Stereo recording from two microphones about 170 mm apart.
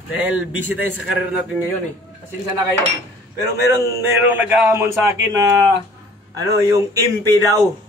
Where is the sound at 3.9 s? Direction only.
10° right (ahead or behind).